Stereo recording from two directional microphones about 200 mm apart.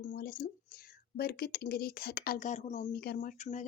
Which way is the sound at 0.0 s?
45° left (ahead or behind).